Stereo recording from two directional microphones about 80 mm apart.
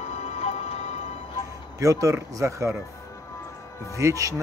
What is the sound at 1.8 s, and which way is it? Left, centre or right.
Speech, right.